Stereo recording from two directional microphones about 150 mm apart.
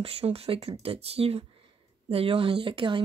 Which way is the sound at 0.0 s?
40° right (ahead or behind).